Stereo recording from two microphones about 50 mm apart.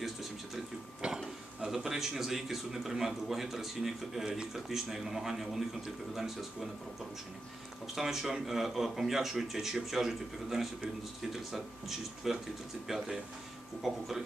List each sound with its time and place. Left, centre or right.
1.0 s a sound: centre
1.7 s a man's voice: centre
7.9 s a man's voice: centre